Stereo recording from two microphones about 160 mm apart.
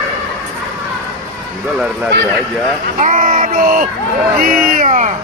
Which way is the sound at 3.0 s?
55° right (ahead or behind).